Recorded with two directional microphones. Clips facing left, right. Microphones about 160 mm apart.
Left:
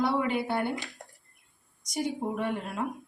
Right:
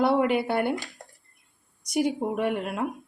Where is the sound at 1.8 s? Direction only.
65° right (ahead or behind).